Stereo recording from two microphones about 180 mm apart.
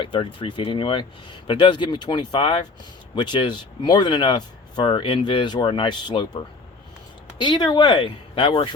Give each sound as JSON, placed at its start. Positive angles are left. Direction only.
{"t": 0.0, "sound": "speech", "side_deg": 30}